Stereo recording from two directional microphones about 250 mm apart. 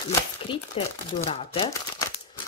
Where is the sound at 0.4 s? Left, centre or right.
Left.